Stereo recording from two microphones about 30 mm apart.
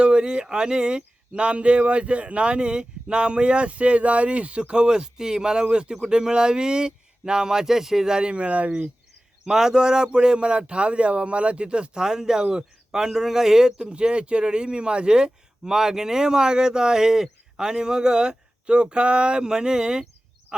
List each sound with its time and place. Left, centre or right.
0.0 s speech: right
4.9 s speech: right
8.1 s speech: right
9.4 s speech: centre; by 11.9 s right
11.9 s speech: right
13.9 s speech: right
20.5 s speech: right